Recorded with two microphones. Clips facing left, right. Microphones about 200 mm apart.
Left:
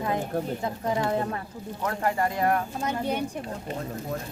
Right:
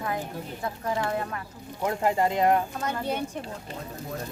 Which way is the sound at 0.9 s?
25° left (ahead or behind).